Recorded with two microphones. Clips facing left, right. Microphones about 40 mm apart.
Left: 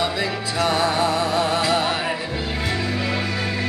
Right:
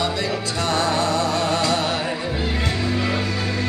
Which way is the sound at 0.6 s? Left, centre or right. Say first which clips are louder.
Even; centre.